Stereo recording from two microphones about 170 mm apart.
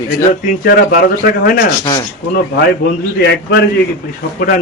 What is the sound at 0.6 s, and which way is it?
Speech, 60° left (ahead or behind).